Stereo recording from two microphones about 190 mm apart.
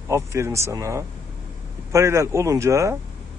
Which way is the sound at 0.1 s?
15° right (ahead or behind).